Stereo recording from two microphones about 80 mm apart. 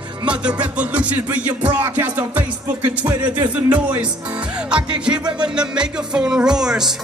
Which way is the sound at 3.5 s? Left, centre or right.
Centre.